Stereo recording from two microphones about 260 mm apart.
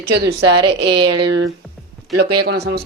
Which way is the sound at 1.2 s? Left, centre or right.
Right.